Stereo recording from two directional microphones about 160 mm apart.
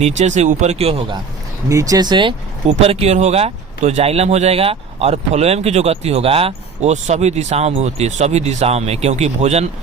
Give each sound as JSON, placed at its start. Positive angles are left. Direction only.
{"t": 0.0, "sound": "speech", "side_deg": -45}
{"t": 1.7, "sound": "speech", "side_deg": -20}
{"t": 2.6, "sound": "speech", "side_deg": -40}